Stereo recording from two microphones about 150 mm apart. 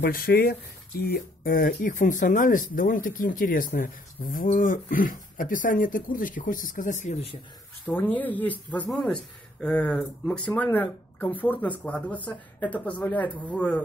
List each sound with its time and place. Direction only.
0.0 s speech: 75° left (ahead or behind); by 7.2 s 55° left (ahead or behind)
7.9 s speech: 10° left (ahead or behind)